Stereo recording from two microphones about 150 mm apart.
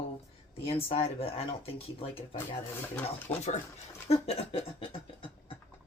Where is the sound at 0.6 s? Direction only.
40° left (ahead or behind).